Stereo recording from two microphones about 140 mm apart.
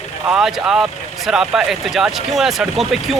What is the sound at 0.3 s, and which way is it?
Speech, 5° right (ahead or behind).